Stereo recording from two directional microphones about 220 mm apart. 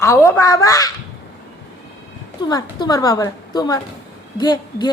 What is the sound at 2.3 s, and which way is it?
A woman's voice, 20° left (ahead or behind).